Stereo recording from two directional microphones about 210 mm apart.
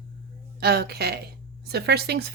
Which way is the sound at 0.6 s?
50° right (ahead or behind).